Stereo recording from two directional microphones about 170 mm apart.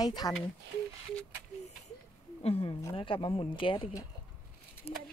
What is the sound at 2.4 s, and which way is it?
Speech, 35° left (ahead or behind).